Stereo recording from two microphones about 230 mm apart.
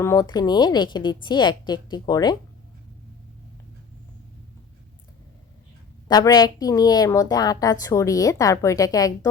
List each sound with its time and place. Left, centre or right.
0.0 s a woman's voice: centre
6.1 s a woman's voice: centre